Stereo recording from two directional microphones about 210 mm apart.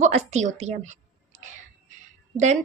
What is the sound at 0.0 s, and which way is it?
Speech, 35° right (ahead or behind).